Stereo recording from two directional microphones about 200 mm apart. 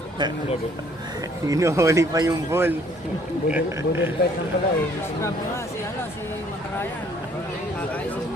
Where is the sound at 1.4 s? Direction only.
15° right (ahead or behind).